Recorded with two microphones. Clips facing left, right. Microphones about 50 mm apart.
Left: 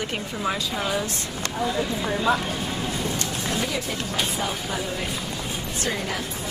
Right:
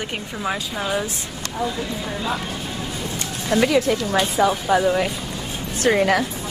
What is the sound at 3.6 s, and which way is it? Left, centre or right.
A woman's voice, right.